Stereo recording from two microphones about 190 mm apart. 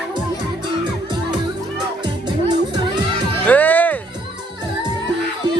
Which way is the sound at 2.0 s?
25° right (ahead or behind).